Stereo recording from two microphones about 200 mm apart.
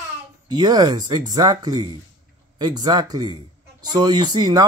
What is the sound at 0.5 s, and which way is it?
Speech, 20° right (ahead or behind).